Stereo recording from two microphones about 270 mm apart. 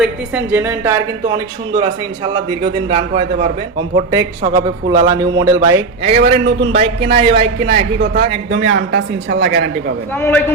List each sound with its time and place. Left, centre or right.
0.0 s a man's voice: centre
6.1 s speech: right
6.6 s speech: centre
7.9 s speech: right
10.2 s a man's voice: centre